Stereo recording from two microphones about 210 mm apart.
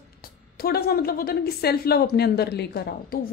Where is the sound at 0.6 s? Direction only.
45° left (ahead or behind).